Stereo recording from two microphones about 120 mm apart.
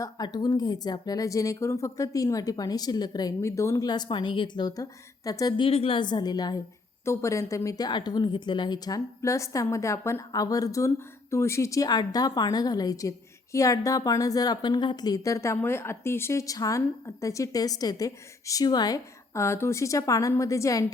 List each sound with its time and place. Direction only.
0.0 s a woman's voice: 35° left (ahead or behind)
7.0 s a woman's voice: 25° left (ahead or behind)
19.3 s a woman's voice: 20° left (ahead or behind)